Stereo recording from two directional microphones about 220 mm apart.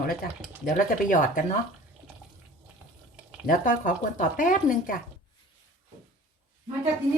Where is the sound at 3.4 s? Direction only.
40° left (ahead or behind).